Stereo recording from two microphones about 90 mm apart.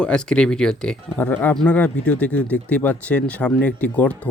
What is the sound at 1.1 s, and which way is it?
Speech, 20° left (ahead or behind).